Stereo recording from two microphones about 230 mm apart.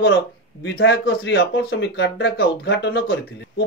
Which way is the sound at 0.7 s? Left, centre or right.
Left.